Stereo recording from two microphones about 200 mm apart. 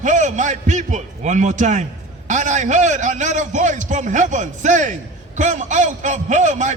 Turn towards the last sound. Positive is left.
turn(degrees=-35)  # may be behind; listen again after turning